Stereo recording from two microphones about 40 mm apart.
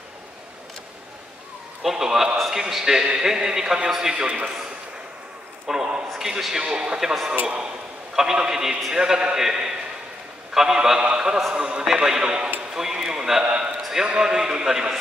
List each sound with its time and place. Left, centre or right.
1.8 s a man's voice: centre
2.3 s a sound: centre
2.8 s a man's voice: centre
5.7 s a man's voice: right
13.4 s a man's voice: right